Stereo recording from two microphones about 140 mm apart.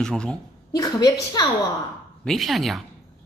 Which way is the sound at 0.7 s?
25° left (ahead or behind).